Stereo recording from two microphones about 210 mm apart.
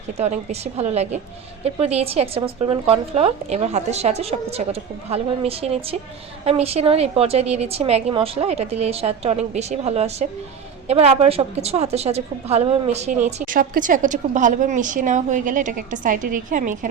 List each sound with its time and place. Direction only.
0.2 s a woman's voice: 30° right (ahead or behind)